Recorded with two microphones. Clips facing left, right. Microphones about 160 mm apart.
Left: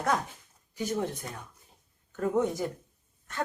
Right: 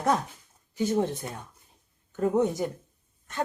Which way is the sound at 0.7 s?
25° right (ahead or behind).